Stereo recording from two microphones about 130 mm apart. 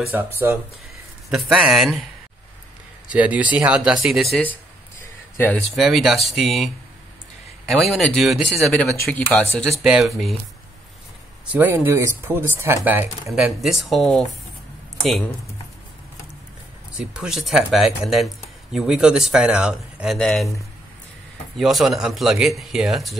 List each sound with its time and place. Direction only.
0.1 s speech: 15° right (ahead or behind)
1.3 s speech: 5° right (ahead or behind)
3.1 s speech: 10° right (ahead or behind)
5.4 s speech: 10° left (ahead or behind)
5.8 s speech: centre (ahead or behind)
7.8 s speech: centre (ahead or behind)
9.1 s speech: 10° left (ahead or behind)
9.8 s speech: centre (ahead or behind)
11.4 s speech: 15° right (ahead or behind)
13.3 s speech: centre (ahead or behind)
16.9 s speech: 5° right (ahead or behind)
21.5 s speech: centre (ahead or behind)